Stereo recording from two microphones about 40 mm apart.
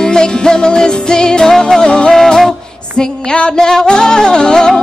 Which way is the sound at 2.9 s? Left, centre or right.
Left.